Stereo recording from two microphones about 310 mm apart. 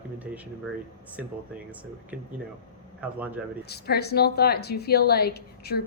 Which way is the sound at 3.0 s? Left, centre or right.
Centre.